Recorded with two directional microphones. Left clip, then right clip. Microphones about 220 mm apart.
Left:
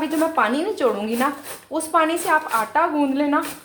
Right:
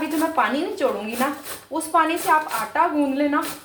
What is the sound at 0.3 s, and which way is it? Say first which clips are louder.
Speech: left 1 dB; 45° left (ahead or behind).